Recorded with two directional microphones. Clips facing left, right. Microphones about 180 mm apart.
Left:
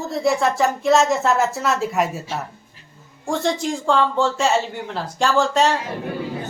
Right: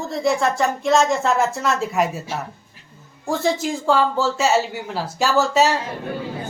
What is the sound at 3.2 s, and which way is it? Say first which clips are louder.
Speech: right 1 dB; 5° right (ahead or behind).